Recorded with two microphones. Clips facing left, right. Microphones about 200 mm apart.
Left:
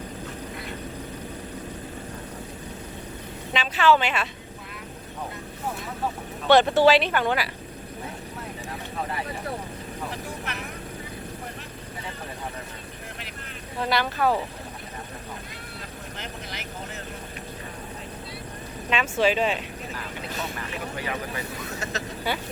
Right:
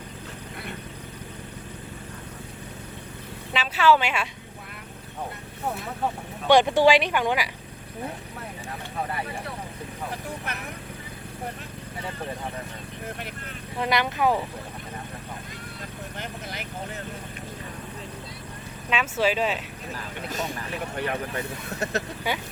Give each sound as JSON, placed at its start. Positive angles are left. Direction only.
{"t": 3.5, "sound": "speech", "side_deg": -5}
{"t": 6.5, "sound": "speech", "side_deg": -15}
{"t": 13.8, "sound": "speech", "side_deg": -15}
{"t": 18.9, "sound": "speech", "side_deg": -5}
{"t": 20.9, "sound": "speech", "side_deg": -55}